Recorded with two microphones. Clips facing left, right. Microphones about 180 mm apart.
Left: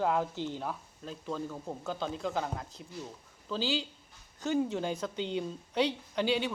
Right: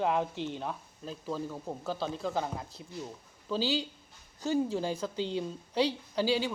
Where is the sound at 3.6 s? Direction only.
40° right (ahead or behind).